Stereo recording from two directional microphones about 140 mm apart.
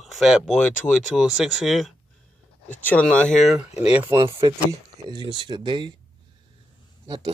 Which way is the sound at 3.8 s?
10° right (ahead or behind).